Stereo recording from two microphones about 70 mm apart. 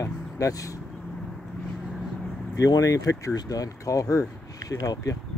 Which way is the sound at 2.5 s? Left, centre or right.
Left.